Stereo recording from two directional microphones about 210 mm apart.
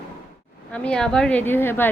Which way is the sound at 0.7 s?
5° left (ahead or behind).